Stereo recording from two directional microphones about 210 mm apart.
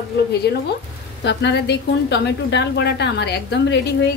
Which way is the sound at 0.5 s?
50° left (ahead or behind).